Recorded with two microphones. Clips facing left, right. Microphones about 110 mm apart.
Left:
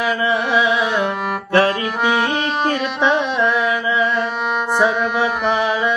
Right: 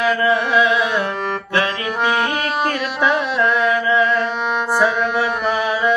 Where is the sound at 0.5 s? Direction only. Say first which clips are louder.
Right 1 dB; 5° left (ahead or behind).